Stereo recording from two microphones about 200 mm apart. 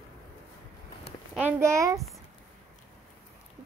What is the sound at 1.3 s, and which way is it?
Child singing, 10° right (ahead or behind).